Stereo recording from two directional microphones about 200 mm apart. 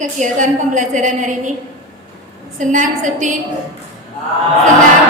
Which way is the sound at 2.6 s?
40° right (ahead or behind).